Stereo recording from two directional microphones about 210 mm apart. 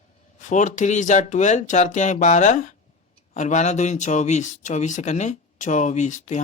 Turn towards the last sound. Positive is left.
turn(degrees=35)  # may be behind; listen again after turning